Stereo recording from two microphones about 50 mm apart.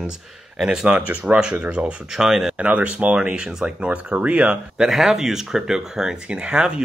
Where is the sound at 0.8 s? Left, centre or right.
Right.